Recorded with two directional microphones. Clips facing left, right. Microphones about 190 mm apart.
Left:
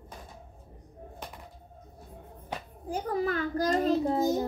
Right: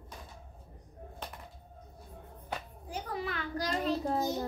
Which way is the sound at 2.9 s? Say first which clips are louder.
Left 8 dB; 45° left (ahead or behind).